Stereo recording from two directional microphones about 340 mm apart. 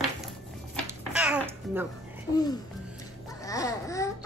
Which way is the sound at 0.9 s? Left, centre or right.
Centre.